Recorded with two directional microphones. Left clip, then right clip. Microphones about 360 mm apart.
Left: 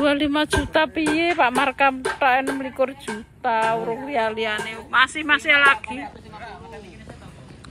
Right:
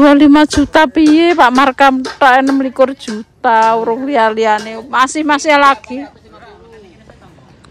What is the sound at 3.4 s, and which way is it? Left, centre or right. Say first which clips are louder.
Speech: right 11 dB; right.